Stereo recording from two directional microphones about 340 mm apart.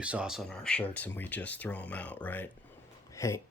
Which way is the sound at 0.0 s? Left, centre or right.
Centre.